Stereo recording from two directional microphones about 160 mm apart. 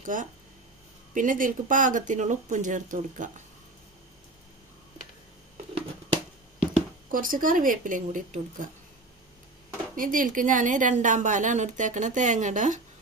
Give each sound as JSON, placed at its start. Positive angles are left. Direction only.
{"t": 0.0, "sound": "a woman's voice", "side_deg": -55}
{"t": 7.1, "sound": "speech", "side_deg": -60}
{"t": 9.9, "sound": "a woman's voice", "side_deg": -60}